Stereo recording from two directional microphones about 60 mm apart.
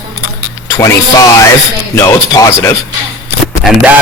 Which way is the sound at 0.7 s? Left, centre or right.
Left.